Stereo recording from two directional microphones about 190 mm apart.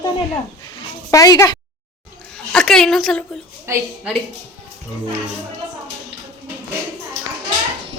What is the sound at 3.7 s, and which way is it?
Speech, 15° right (ahead or behind).